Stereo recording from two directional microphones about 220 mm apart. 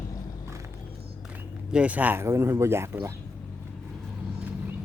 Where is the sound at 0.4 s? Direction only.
15° right (ahead or behind).